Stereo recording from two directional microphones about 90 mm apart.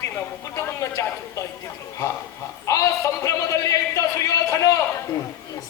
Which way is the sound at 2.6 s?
35° left (ahead or behind).